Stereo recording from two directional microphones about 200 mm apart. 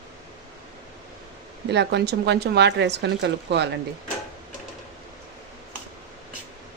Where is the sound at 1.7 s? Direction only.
60° right (ahead or behind).